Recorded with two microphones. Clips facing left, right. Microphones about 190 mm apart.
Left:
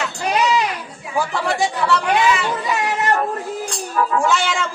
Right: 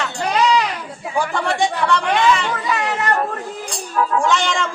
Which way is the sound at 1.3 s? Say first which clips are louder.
Right 1 dB; 5° left (ahead or behind).